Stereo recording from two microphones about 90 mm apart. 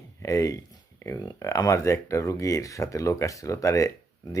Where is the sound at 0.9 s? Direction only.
30° left (ahead or behind).